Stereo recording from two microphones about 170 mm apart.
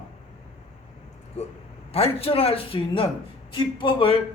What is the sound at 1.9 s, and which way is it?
A man's voice, 35° left (ahead or behind).